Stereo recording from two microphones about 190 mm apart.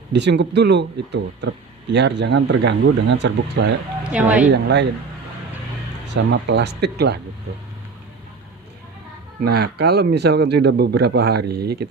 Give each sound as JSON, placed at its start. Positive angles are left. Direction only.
{"t": 0.1, "sound": "speech", "side_deg": -65}
{"t": 4.0, "sound": "speech", "side_deg": -5}
{"t": 4.5, "sound": "speech", "side_deg": -65}
{"t": 6.3, "sound": "speech", "side_deg": -65}
{"t": 9.4, "sound": "speech", "side_deg": -60}